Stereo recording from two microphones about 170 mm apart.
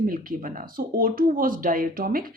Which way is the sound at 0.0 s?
55° right (ahead or behind).